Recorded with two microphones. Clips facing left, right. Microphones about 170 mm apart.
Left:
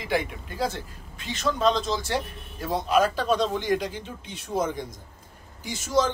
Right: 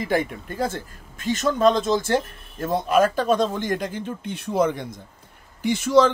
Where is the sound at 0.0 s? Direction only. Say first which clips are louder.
Right 4 dB; 45° right (ahead or behind).